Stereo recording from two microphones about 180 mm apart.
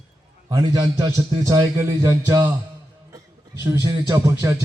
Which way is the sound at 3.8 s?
15° right (ahead or behind).